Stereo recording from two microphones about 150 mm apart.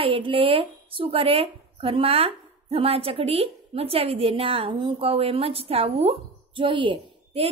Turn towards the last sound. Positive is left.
turn(degrees=-40)  # may be behind; listen again after turning